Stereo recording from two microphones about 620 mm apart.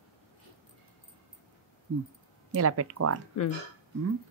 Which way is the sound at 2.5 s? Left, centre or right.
Right.